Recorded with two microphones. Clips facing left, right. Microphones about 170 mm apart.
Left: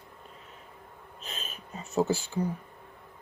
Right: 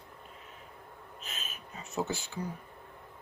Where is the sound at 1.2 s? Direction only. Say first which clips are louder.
Left 4 dB; 35° left (ahead or behind).